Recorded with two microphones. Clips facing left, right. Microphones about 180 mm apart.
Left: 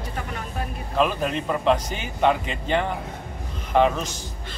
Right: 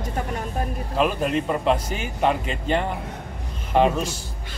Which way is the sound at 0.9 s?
5° right (ahead or behind).